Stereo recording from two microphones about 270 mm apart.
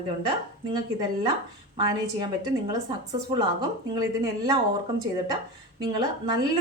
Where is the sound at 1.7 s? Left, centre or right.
Centre.